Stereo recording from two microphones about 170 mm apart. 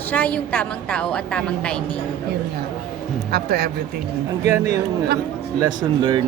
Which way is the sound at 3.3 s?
65° right (ahead or behind).